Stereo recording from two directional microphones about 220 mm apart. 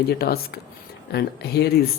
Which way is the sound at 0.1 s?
45° left (ahead or behind).